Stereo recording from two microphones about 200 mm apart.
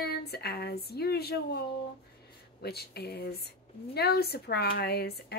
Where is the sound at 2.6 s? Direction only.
55° left (ahead or behind).